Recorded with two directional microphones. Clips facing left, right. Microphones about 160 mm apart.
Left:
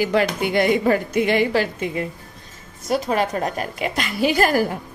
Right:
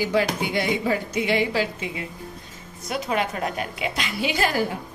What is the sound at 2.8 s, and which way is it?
A woman's voice, 40° left (ahead or behind).